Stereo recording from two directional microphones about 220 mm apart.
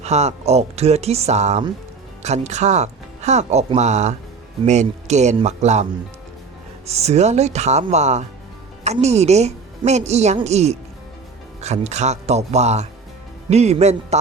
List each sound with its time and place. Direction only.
0.0 s a woman's voice: 30° right (ahead or behind)